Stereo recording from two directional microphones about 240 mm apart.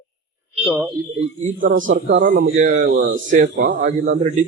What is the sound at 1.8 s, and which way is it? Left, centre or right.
A man's voice, right.